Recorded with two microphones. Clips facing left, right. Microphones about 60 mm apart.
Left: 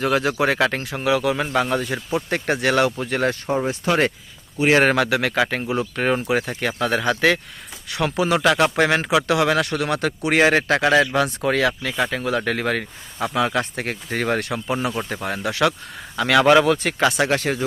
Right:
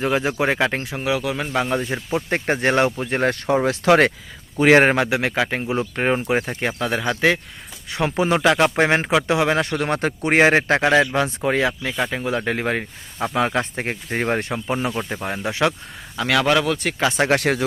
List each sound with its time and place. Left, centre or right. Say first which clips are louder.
0.0 s speech: left 1 dB; centre
0.9 s speech: left 3 dB; centre
1.8 s speech: even; right
3.2 s speech: right 4 dB; right
4.9 s speech: even; right
6.7 s speech: left 5 dB; centre
7.9 s speech: right 1 dB; right
10.8 s speech: even; centre
13.3 s speech: even; right
14.8 s speech: even; centre
15.1 s speech: even; centre
16.1 s speech: left 4 dB; centre
17.2 s speech: right 3 dB; right